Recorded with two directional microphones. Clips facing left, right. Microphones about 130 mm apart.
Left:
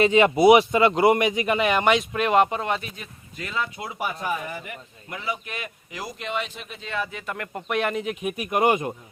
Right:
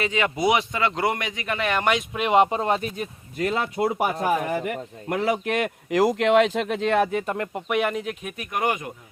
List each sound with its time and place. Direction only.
0.0 s a man's voice: 20° left (ahead or behind); by 2.0 s centre (ahead or behind)
2.1 s speech: 20° right (ahead or behind); by 4.4 s 45° right (ahead or behind)
4.4 s a man's voice: 65° right (ahead or behind)
7.1 s speech: 45° right (ahead or behind)
7.5 s speech: 5° right (ahead or behind)
8.2 s speech: 15° left (ahead or behind)